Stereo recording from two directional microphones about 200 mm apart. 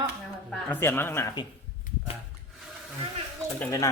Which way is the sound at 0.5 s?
10° left (ahead or behind).